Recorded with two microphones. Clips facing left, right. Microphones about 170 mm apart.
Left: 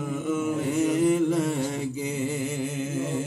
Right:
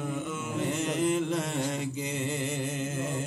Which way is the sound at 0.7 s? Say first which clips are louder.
Left 6 dB; 10° left (ahead or behind).